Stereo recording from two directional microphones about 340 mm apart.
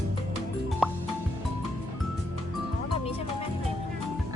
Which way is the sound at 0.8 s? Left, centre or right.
Centre.